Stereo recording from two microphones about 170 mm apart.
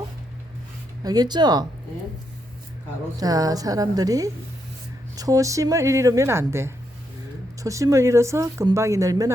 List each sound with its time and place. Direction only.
1.0 s a woman's voice: 25° right (ahead or behind)
3.2 s a woman's voice: 20° right (ahead or behind)